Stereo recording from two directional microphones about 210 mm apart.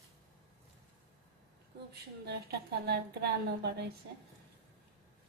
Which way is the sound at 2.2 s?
50° right (ahead or behind).